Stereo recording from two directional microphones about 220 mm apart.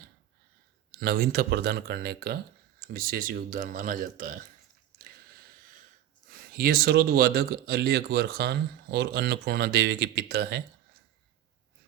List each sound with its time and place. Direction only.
0.9 s speech: 45° right (ahead or behind)
4.9 s a sound: 40° right (ahead or behind)
6.3 s speech: 40° right (ahead or behind)